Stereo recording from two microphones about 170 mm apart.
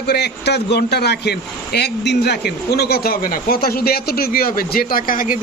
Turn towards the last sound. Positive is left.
turn(degrees=55)  # may be behind; listen again after turning